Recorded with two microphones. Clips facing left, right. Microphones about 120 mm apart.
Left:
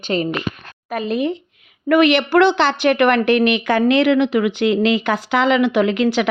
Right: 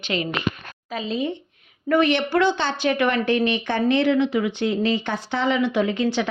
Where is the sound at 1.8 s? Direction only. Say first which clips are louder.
Left 5 dB; 90° left.